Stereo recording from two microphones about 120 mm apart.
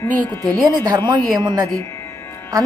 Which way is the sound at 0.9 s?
35° right (ahead or behind).